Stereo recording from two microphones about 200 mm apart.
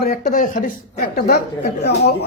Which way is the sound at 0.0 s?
40° left (ahead or behind).